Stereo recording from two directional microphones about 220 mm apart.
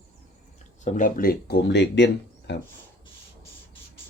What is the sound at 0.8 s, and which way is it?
Speech, 35° left (ahead or behind).